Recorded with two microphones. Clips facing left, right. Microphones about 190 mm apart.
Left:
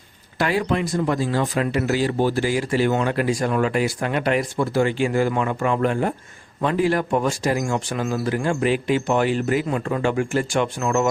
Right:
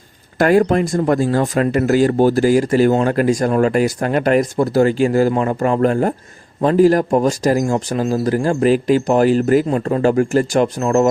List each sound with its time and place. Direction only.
0.3 s speech: 50° right (ahead or behind)